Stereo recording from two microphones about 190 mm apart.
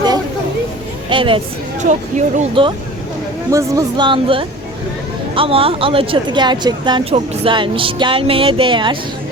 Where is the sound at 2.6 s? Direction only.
25° right (ahead or behind).